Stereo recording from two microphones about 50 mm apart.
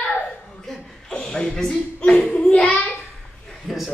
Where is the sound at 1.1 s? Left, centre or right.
Centre.